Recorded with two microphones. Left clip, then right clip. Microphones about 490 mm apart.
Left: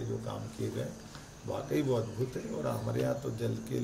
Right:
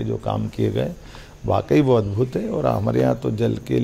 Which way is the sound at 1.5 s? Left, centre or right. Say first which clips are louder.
Right 15 dB; right.